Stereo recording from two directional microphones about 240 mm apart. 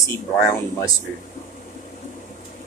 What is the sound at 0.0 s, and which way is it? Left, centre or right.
Speech, centre.